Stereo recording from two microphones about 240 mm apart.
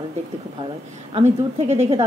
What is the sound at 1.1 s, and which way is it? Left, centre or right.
Speech, right.